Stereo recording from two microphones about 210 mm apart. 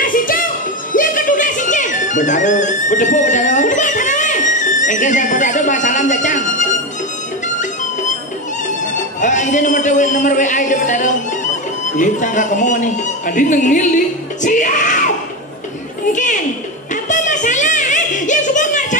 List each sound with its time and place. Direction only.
0.0 s music: 40° left (ahead or behind)
0.9 s speech: 40° left (ahead or behind)
7.4 s music: 35° left (ahead or behind)
8.6 s a man's voice: 35° left (ahead or behind)
16.1 s speech: 35° left (ahead or behind)
16.9 s music: 35° left (ahead or behind)